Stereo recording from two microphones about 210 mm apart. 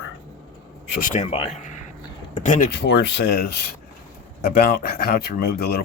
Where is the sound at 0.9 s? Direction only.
40° left (ahead or behind).